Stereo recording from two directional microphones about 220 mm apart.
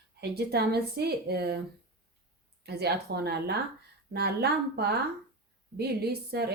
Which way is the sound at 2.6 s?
45° right (ahead or behind).